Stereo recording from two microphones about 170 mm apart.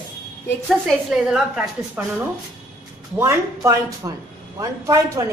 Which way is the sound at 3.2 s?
15° right (ahead or behind).